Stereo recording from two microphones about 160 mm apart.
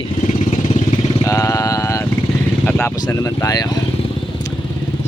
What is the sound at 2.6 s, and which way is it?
Speech, 10° left (ahead or behind).